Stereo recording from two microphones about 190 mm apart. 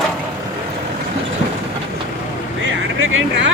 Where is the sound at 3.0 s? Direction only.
90° right.